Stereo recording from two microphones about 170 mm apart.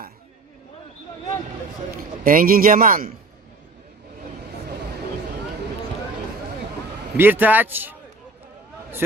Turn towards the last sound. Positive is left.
turn(degrees=-10)  # may be behind; listen again after turning